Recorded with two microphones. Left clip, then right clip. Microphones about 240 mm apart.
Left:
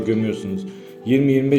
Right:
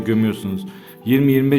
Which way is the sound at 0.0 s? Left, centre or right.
Right.